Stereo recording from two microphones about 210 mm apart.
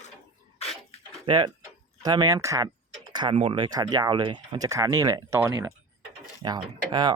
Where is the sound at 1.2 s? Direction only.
20° right (ahead or behind).